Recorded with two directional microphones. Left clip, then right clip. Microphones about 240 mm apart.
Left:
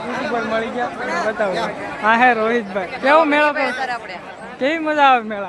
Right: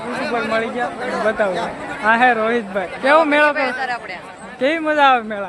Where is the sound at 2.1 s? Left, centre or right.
Centre.